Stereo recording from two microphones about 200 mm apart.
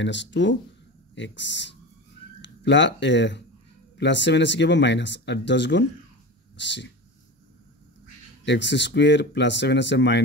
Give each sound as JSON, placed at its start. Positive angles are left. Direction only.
{"t": 0.0, "sound": "speech", "side_deg": 65}
{"t": 6.5, "sound": "dog", "side_deg": 60}
{"t": 8.5, "sound": "speech", "side_deg": 60}